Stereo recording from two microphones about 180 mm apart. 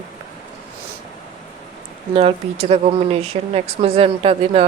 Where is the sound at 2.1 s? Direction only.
35° right (ahead or behind).